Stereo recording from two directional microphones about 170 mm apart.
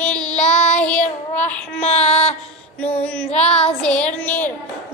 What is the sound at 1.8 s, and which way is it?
Child singing, 40° left (ahead or behind).